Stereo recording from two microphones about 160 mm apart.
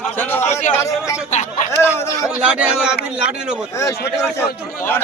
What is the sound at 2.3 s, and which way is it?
Speech, 5° right (ahead or behind).